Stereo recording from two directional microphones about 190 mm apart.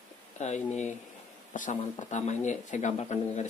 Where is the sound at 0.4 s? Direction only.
40° left (ahead or behind).